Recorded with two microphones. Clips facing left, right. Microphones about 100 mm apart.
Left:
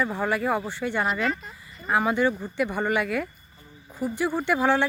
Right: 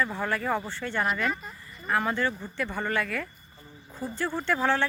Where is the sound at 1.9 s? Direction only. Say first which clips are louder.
Left 4 dB; 15° left (ahead or behind).